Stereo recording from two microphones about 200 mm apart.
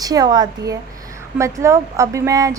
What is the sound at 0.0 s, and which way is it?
A woman's voice, 20° right (ahead or behind).